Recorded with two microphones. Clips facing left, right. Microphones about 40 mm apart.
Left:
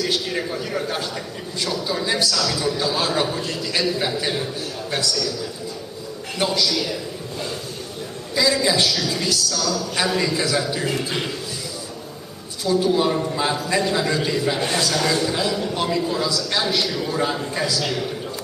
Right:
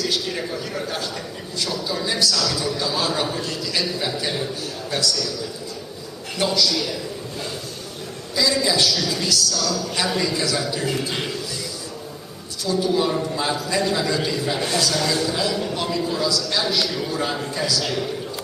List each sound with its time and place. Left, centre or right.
0.0 s a man's voice: centre
6.3 s a man's voice: centre
6.7 s a man's voice: centre
8.4 s a man's voice: centre
12.6 s a man's voice: centre